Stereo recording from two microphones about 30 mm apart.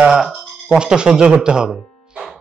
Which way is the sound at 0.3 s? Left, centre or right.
Right.